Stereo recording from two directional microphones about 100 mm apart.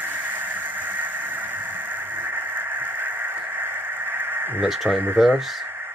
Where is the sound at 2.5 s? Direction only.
20° right (ahead or behind).